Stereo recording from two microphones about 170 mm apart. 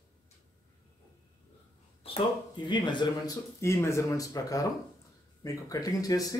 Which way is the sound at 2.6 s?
25° left (ahead or behind).